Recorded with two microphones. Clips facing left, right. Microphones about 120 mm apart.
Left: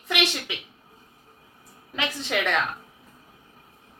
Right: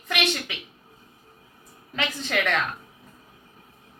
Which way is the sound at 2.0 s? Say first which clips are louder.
Even; 5° left (ahead or behind).